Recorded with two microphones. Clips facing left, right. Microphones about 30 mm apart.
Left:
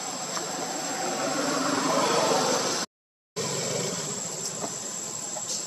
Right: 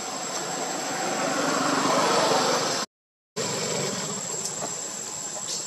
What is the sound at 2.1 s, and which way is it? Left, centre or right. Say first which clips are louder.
Vehicle: right 2 dB; right.